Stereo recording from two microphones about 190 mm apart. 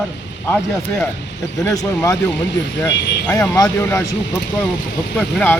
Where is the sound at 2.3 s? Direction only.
70° left (ahead or behind).